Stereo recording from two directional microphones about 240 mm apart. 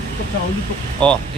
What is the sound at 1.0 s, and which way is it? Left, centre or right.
Speech, centre.